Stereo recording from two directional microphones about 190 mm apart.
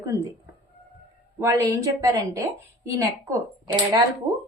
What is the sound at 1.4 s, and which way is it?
A woman's voice, 15° right (ahead or behind).